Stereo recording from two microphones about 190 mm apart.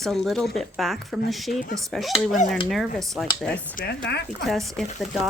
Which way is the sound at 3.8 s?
45° left (ahead or behind).